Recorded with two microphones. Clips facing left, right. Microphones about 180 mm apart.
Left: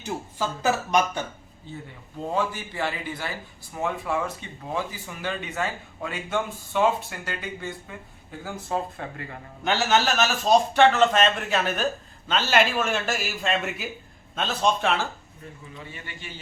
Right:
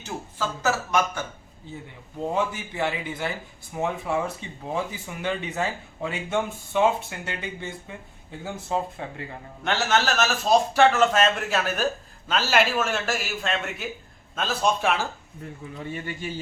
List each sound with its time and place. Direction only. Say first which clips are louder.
0.0 s speech: left 1 dB; 15° left (ahead or behind)
2.3 s speech: left 1 dB; 20° right (ahead or behind)
9.6 s a man's voice: left 1 dB; centre (ahead or behind)
15.8 s a man's voice: right 10 dB; 45° right (ahead or behind)